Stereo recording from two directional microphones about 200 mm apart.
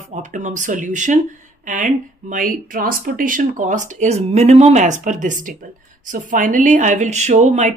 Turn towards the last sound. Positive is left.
turn(degrees=-35)  # may be behind; listen again after turning